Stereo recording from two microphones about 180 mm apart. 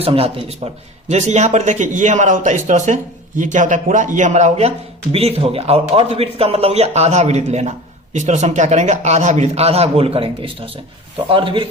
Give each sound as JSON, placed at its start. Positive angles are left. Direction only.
{"t": 0.0, "sound": "a man's voice", "side_deg": -30}